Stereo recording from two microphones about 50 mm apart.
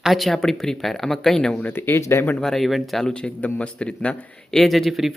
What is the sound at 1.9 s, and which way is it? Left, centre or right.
Speech, left.